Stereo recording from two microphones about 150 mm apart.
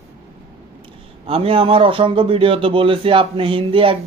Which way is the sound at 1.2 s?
40° right (ahead or behind).